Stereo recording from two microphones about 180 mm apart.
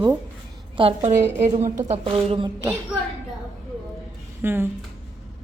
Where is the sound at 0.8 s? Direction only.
35° right (ahead or behind).